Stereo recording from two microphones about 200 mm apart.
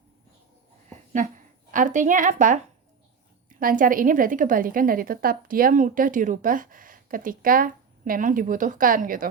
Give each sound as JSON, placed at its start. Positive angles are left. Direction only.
{"t": 0.9, "sound": "a sound", "side_deg": -40}
{"t": 1.7, "sound": "a woman's voice", "side_deg": -40}
{"t": 3.6, "sound": "a woman's voice", "side_deg": -45}